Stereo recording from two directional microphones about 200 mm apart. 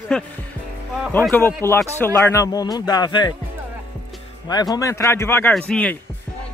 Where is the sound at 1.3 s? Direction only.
10° left (ahead or behind).